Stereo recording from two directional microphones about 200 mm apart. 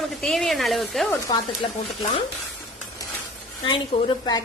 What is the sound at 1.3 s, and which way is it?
Speech, 20° left (ahead or behind).